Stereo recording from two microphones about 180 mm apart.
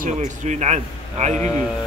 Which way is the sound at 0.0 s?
40° right (ahead or behind).